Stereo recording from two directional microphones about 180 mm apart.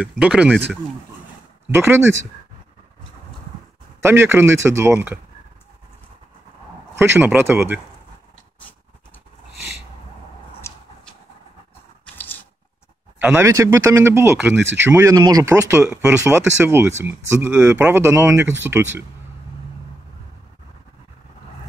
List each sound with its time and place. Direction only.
0.0 s speech: 5° right (ahead or behind)
1.7 s speech: 10° right (ahead or behind)
4.0 s speech: 15° right (ahead or behind)
7.2 s speech: 10° right (ahead or behind)
10.6 s a sound: 15° left (ahead or behind)
12.2 s a sound: 10° left (ahead or behind)
13.2 s speech: 10° right (ahead or behind)